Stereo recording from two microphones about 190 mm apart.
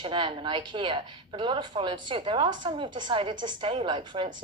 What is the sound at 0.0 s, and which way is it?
A woman's voice, 25° right (ahead or behind).